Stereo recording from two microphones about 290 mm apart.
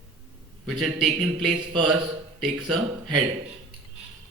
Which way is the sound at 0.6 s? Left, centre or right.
Centre.